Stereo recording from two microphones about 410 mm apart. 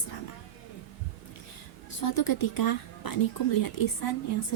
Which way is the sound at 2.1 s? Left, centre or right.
Left.